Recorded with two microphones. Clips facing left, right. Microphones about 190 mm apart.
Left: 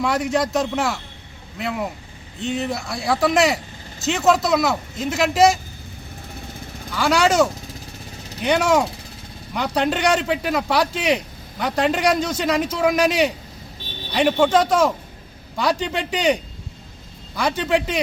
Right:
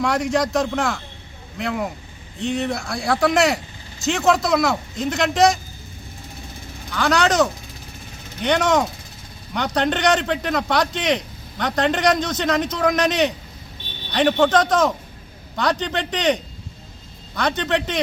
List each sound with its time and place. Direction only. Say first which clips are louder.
0.0 s speech: even; 5° left (ahead or behind)
6.9 s speech: left 1 dB; 10° left (ahead or behind)